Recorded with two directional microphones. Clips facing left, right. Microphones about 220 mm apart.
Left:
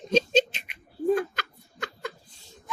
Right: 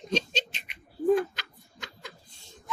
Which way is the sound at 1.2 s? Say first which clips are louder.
Even; 55° left (ahead or behind).